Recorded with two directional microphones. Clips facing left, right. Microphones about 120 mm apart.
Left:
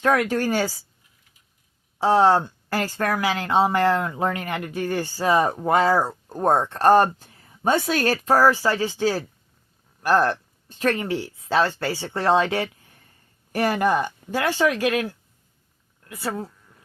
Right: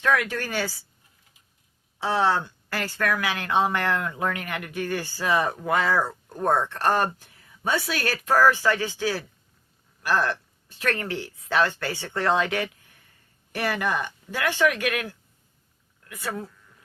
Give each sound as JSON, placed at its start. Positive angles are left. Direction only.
{"t": 0.0, "sound": "speech", "side_deg": 40}
{"t": 2.0, "sound": "speech", "side_deg": 40}
{"t": 4.8, "sound": "speech", "side_deg": 40}
{"t": 8.4, "sound": "speech", "side_deg": 30}
{"t": 11.1, "sound": "speech", "side_deg": 25}
{"t": 13.5, "sound": "speech", "side_deg": 40}
{"t": 16.0, "sound": "speech", "side_deg": 35}